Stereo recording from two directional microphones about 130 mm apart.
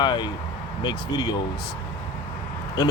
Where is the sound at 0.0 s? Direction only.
35° left (ahead or behind).